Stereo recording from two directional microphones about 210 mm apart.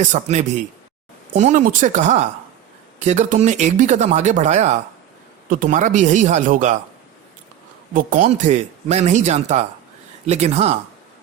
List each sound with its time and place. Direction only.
0.0 s speech: 35° right (ahead or behind)
7.9 s speech: 35° right (ahead or behind)